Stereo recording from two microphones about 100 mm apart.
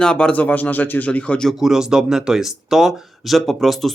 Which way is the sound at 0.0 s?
10° left (ahead or behind).